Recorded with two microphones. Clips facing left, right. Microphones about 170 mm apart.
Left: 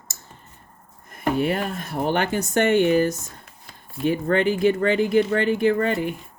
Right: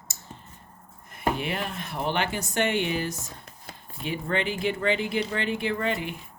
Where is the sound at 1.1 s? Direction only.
40° left (ahead or behind).